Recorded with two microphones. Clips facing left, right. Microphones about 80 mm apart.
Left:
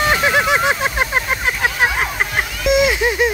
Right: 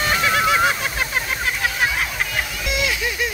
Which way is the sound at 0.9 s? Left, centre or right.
Left.